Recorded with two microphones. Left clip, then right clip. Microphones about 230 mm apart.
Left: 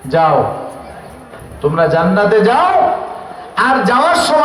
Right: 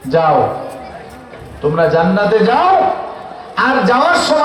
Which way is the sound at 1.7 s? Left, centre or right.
Left.